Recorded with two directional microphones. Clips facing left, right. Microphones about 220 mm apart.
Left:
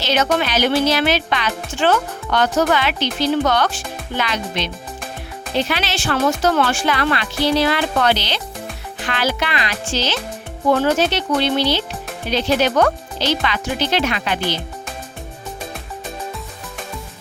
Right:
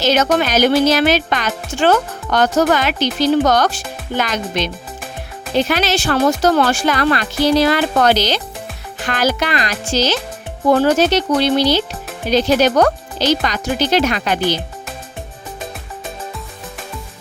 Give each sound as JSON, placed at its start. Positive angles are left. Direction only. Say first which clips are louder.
{"t": 0.0, "sound": "speech", "louder": "right 4 dB", "side_deg": -45}